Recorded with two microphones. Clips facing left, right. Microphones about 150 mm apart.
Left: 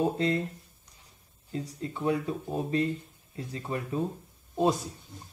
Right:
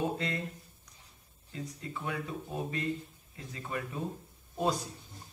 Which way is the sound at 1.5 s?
30° left (ahead or behind).